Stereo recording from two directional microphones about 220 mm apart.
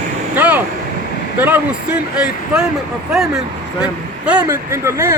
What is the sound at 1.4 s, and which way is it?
Speech, 5° right (ahead or behind).